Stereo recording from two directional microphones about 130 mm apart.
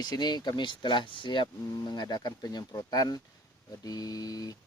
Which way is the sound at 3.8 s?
30° left (ahead or behind).